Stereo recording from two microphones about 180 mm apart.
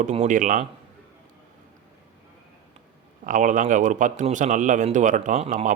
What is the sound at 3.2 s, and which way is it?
A man's voice, 45° right (ahead or behind).